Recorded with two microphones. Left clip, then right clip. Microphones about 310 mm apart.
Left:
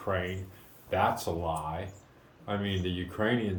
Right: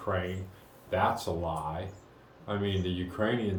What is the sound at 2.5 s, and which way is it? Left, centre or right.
Speech, centre.